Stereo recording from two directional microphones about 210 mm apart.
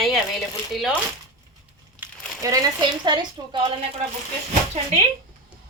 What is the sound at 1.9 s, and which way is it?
Speech, 15° right (ahead or behind).